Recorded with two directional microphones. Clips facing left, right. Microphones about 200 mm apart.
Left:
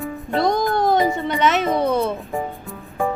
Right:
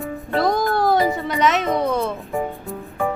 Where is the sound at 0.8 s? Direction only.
20° left (ahead or behind).